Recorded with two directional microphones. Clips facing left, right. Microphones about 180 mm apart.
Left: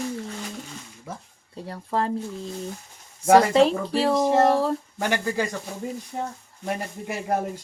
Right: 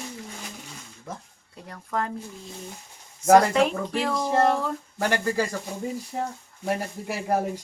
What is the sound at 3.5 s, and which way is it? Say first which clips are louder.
Speech: left 4 dB; 30° left (ahead or behind).